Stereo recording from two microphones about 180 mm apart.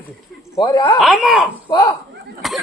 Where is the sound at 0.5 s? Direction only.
25° left (ahead or behind).